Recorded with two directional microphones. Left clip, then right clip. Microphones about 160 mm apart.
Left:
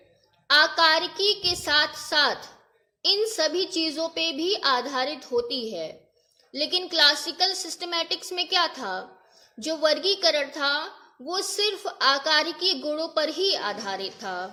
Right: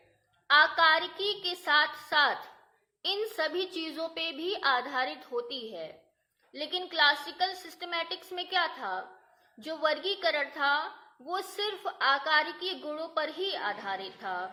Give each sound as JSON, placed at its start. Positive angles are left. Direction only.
{"t": 0.4, "sound": "a woman's voice", "side_deg": 35}